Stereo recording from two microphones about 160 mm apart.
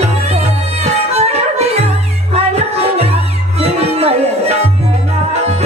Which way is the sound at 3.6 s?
40° right (ahead or behind).